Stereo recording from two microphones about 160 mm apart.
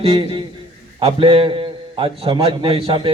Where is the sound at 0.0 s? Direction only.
35° right (ahead or behind).